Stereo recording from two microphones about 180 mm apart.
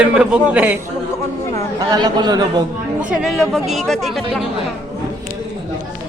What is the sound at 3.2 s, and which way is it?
Speech, centre (ahead or behind).